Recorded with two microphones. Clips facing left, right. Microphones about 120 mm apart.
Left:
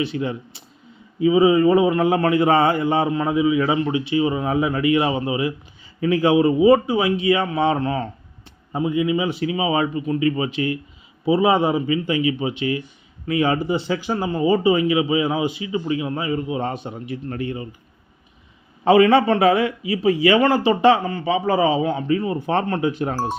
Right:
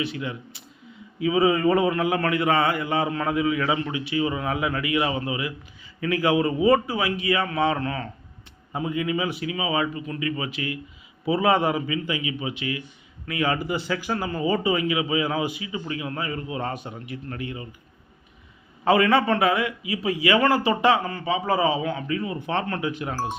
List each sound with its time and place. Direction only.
0.0 s speech: 30° left (ahead or behind)
1.4 s a man's voice: 10° left (ahead or behind)
1.9 s speech: 30° left (ahead or behind)
18.9 s speech: 25° left (ahead or behind)